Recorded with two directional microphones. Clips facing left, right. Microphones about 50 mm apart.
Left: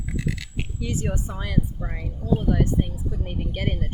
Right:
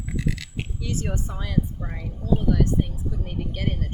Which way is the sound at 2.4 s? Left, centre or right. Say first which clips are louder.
Even; left.